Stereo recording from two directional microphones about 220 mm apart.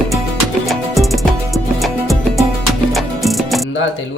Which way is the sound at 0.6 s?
Centre (ahead or behind).